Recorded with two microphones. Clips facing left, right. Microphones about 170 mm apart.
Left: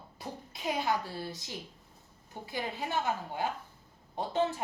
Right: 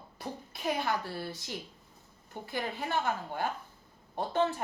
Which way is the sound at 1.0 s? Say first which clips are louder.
Right 1 dB; 60° right (ahead or behind).